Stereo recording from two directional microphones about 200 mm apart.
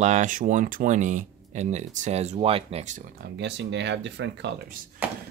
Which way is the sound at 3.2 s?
60° right (ahead or behind).